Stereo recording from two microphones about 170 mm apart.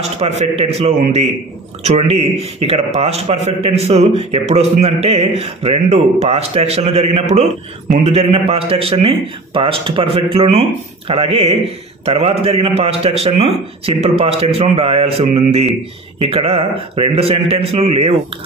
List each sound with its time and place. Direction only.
0.2 s a man's voice: 40° right (ahead or behind)